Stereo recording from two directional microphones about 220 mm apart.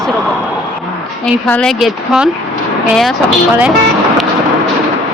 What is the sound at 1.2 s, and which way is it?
A woman's voice, 5° left (ahead or behind).